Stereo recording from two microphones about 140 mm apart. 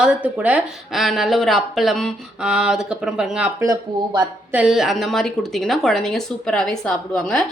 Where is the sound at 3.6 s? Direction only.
25° right (ahead or behind).